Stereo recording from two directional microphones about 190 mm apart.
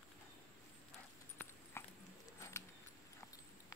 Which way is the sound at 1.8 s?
15° left (ahead or behind).